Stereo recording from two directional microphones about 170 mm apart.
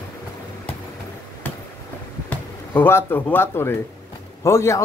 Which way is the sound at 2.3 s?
10° left (ahead or behind).